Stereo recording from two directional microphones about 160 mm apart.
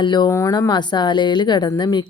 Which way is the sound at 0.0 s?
30° left (ahead or behind).